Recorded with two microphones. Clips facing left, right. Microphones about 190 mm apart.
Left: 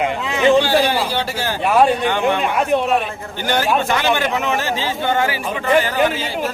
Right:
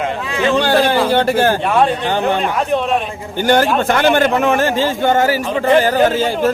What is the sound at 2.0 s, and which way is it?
Speech, 35° right (ahead or behind).